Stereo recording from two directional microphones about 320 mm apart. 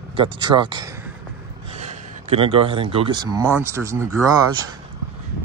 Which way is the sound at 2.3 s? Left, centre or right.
Centre.